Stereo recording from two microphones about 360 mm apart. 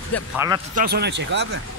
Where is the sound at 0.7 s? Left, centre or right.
Right.